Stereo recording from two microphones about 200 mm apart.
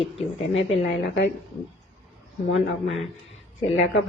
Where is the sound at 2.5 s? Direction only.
75° left (ahead or behind).